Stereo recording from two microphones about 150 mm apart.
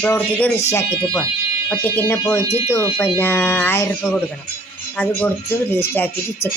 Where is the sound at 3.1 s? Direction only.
15° left (ahead or behind).